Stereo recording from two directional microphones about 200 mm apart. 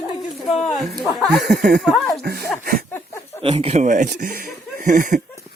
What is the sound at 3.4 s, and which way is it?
Speech, 30° right (ahead or behind).